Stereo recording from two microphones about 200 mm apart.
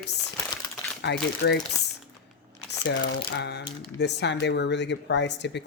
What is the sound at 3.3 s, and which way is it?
Speech, 60° left (ahead or behind).